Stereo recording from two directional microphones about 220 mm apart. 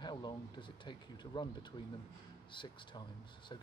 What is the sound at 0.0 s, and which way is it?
Speech, 20° left (ahead or behind).